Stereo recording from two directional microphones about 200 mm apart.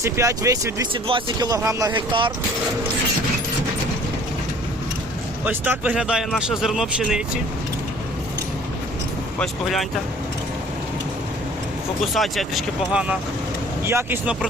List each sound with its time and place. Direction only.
0.0 s speech: 15° right (ahead or behind)
5.5 s speech: 5° right (ahead or behind)
9.4 s speech: centre (ahead or behind)
12.1 s speech: centre (ahead or behind)